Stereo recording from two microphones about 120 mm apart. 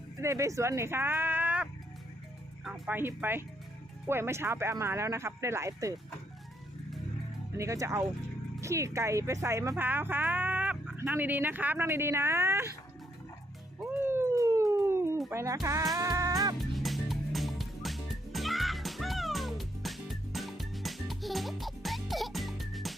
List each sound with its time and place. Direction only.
0.2 s speech: 25° right (ahead or behind)
2.6 s music: 5° right (ahead or behind)
2.9 s speech: 20° right (ahead or behind)
7.6 s speech: 25° right (ahead or behind)
14.0 s a sound: 20° right (ahead or behind)
15.3 s a child's voice: 25° right (ahead or behind)
16.0 s music: 25° right (ahead or behind)
16.6 s music: centre (ahead or behind)